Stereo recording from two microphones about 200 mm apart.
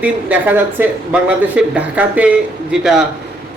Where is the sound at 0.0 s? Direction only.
10° right (ahead or behind).